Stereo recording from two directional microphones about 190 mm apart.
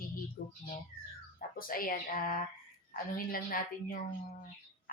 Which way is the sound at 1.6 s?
50° left (ahead or behind).